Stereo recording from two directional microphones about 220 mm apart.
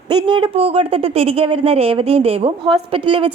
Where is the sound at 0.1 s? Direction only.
20° right (ahead or behind).